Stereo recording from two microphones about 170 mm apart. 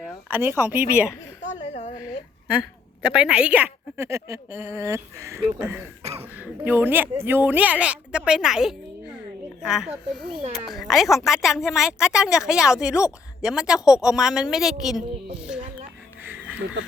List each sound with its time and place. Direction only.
0.3 s speech: 15° right (ahead or behind)
1.6 s a sound: 40° left (ahead or behind)
2.5 s speech: 5° right (ahead or behind)
6.0 s throat clearing: 40° right (ahead or behind)
6.2 s a woman's voice: 10° right (ahead or behind)
16.2 s a sound: 10° right (ahead or behind)